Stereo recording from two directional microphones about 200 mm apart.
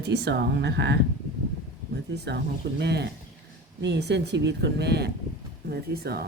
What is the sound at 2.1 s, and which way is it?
Speech, 60° right (ahead or behind).